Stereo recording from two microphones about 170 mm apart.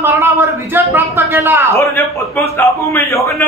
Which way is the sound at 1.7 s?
15° left (ahead or behind).